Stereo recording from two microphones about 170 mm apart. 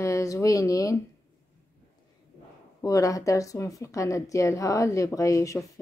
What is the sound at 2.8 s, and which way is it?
A woman's voice, 20° left (ahead or behind).